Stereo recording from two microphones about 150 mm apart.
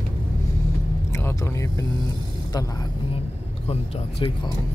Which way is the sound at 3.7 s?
40° left (ahead or behind).